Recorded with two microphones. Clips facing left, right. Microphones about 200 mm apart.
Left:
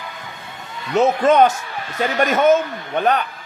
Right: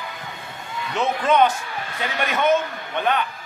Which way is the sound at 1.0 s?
40° left (ahead or behind).